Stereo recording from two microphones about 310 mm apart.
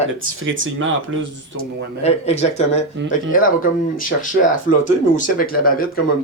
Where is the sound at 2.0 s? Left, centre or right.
Left.